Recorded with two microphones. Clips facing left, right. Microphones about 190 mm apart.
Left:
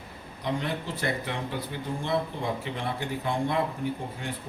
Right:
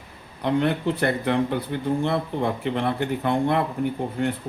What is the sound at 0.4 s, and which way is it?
Speech, 60° right (ahead or behind).